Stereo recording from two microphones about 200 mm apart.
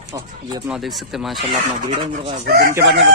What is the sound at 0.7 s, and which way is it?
Speech, centre (ahead or behind).